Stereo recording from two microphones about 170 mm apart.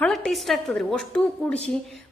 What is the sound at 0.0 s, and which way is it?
A woman's voice, 5° left (ahead or behind).